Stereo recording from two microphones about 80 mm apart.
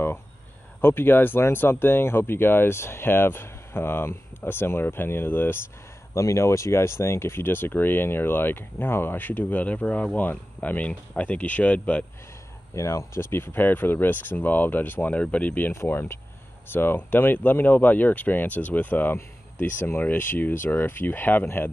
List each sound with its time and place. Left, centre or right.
0.7 s speech: left
6.1 s speech: left; by 12.1 s centre
12.7 s speech: left